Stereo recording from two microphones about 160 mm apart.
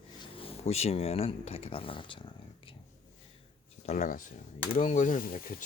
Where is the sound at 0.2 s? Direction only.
35° left (ahead or behind).